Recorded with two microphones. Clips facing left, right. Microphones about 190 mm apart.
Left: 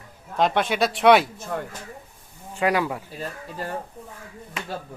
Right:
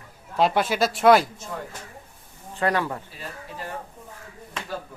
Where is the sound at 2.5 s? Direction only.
10° left (ahead or behind).